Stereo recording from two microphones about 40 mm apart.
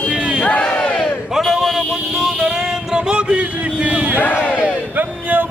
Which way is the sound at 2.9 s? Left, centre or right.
Right.